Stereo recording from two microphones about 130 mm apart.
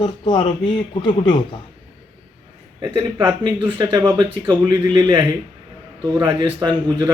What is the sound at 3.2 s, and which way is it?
A man's voice, 35° right (ahead or behind).